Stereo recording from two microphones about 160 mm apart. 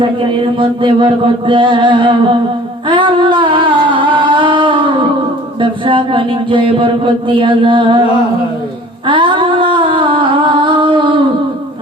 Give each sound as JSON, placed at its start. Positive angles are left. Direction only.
{"t": 0.0, "sound": "speech", "side_deg": -30}
{"t": 2.8, "sound": "music", "side_deg": -30}
{"t": 5.5, "sound": "speech", "side_deg": -30}
{"t": 9.0, "sound": "music", "side_deg": -30}